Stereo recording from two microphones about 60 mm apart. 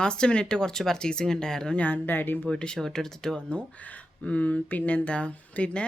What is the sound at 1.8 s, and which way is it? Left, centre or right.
Speech, left.